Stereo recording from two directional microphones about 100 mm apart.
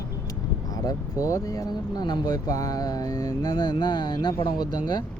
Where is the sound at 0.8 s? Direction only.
35° left (ahead or behind).